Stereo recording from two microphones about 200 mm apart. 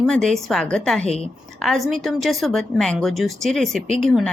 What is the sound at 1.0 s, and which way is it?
Speech, 30° left (ahead or behind).